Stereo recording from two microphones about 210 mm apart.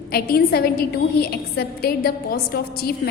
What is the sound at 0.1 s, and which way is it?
A woman's voice, 45° left (ahead or behind).